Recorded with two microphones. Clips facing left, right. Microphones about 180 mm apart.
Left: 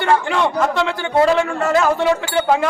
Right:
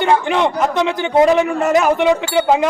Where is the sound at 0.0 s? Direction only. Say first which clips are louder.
Right 2 dB; 20° right (ahead or behind).